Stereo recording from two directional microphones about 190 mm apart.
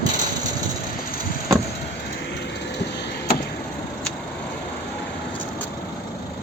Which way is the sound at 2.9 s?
65° left (ahead or behind).